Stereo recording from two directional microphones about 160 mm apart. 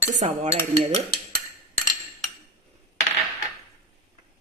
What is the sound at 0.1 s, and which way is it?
Speech, 50° right (ahead or behind).